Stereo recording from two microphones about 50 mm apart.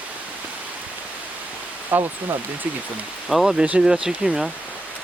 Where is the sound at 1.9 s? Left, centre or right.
Right.